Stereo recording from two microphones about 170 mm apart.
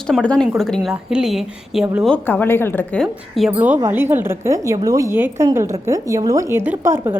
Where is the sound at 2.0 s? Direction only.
10° left (ahead or behind).